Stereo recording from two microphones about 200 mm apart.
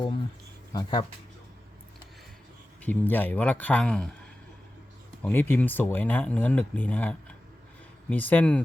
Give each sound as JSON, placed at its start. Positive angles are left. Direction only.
{"t": 0.7, "sound": "speech", "side_deg": 20}
{"t": 2.8, "sound": "speech", "side_deg": 10}
{"t": 5.2, "sound": "speech", "side_deg": 10}